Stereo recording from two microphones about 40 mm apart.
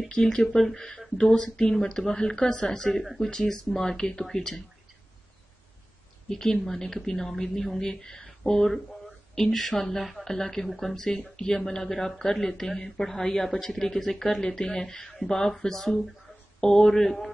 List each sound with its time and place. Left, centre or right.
0.1 s speech: left
6.2 s speech: centre
7.9 s speech: centre
14.6 s speech: centre